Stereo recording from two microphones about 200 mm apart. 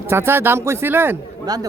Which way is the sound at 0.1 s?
10° right (ahead or behind).